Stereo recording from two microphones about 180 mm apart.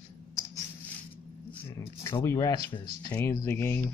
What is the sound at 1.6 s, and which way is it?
Speech, 15° left (ahead or behind).